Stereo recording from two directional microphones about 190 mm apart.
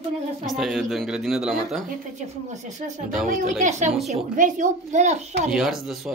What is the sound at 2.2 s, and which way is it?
A child's voice, 40° right (ahead or behind).